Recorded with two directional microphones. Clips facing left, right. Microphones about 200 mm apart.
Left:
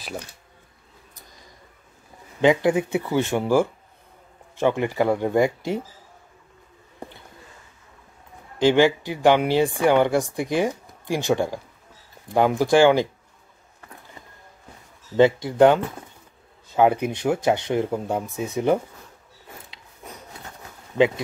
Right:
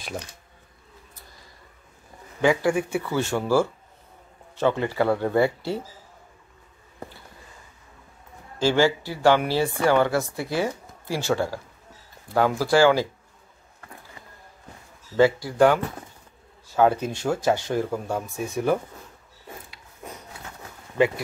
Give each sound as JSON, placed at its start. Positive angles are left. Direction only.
{"t": 2.4, "sound": "speech", "side_deg": 20}
{"t": 8.5, "sound": "speech", "side_deg": 15}
{"t": 15.1, "sound": "speech", "side_deg": 20}